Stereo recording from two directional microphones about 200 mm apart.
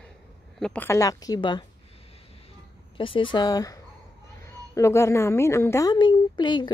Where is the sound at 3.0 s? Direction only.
25° left (ahead or behind).